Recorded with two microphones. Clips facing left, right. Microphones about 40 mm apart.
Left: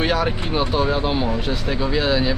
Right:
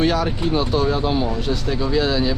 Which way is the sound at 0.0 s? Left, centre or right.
Centre.